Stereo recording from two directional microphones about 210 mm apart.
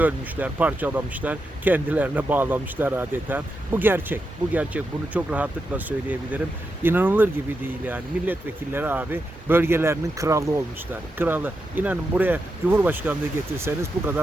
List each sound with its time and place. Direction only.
0.0 s speech: 5° right (ahead or behind)